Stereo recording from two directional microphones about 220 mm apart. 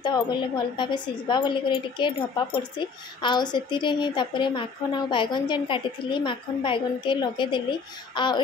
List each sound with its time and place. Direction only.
0.0 s a woman's voice: 20° left (ahead or behind)